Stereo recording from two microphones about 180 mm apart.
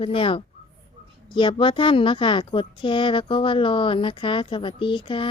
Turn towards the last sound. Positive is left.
turn(degrees=25)  # may be behind; listen again after turning